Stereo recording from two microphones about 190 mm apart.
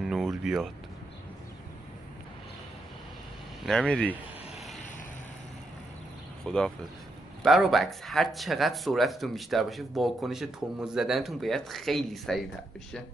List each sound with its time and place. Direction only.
0.0 s music: centre (ahead or behind)
3.6 s speech: centre (ahead or behind)
6.4 s speech: 5° left (ahead or behind)